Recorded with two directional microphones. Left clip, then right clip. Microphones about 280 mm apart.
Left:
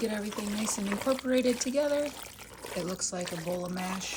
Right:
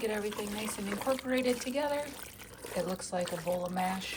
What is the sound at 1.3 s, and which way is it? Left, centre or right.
Speech, centre.